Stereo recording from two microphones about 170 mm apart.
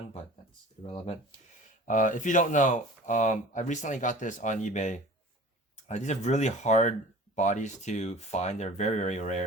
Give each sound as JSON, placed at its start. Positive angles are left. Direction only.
{"t": 0.8, "sound": "speech", "side_deg": 35}
{"t": 1.9, "sound": "speech", "side_deg": 50}